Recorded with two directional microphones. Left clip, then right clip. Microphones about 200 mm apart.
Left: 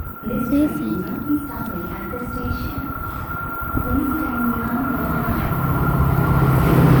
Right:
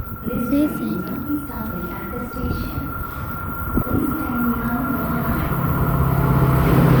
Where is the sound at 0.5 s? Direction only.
Centre (ahead or behind).